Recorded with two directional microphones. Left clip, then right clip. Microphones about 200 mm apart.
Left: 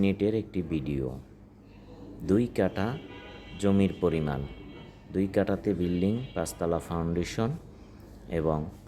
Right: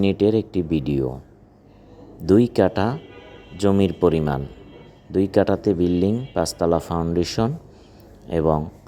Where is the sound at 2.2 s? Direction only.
30° right (ahead or behind).